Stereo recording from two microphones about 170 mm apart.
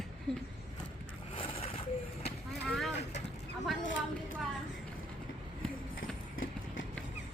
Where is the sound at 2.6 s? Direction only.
Centre (ahead or behind).